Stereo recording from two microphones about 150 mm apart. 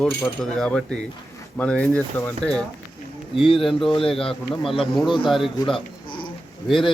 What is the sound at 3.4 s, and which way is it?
Speech, 35° left (ahead or behind).